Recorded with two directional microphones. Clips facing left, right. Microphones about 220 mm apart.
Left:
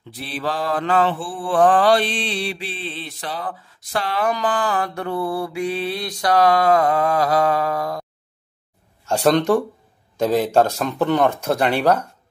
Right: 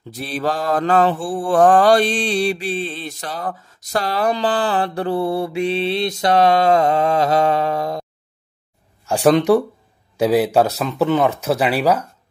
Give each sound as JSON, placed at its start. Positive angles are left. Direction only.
{"t": 0.1, "sound": "mantra", "side_deg": -45}
{"t": 9.0, "sound": "speech", "side_deg": -10}